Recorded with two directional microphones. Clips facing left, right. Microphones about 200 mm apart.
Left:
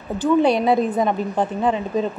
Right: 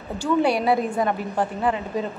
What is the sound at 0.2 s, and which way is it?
A woman's voice, 20° left (ahead or behind).